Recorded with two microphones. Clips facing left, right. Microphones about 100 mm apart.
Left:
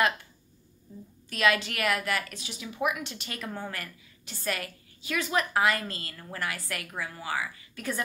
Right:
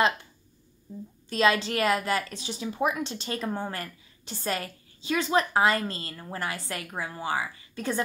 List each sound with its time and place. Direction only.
1.3 s a woman's voice: 30° right (ahead or behind)